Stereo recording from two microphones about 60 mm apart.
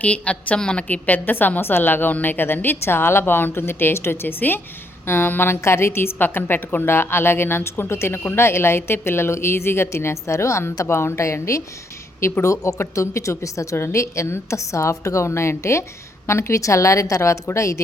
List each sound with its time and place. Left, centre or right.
0.0 s a woman's voice: left
5.5 s a woman's voice: left
13.7 s a woman's voice: left